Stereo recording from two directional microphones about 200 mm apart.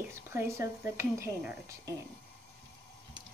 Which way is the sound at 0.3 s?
10° right (ahead or behind).